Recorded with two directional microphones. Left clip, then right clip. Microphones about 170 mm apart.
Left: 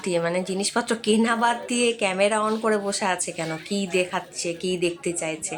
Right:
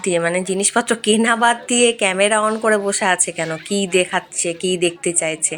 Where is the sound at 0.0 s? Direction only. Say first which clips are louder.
Right 6 dB; 10° right (ahead or behind).